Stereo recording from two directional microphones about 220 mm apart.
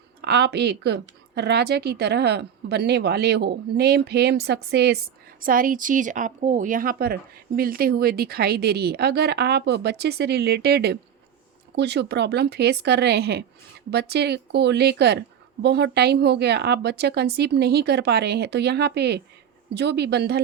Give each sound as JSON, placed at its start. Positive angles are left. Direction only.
{"t": 0.2, "sound": "speech", "side_deg": -50}